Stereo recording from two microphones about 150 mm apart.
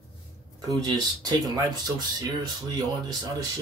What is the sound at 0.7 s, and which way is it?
Speech, 25° right (ahead or behind).